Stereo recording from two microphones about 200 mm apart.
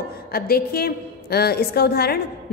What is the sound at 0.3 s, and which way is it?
A woman's voice, 50° left (ahead or behind).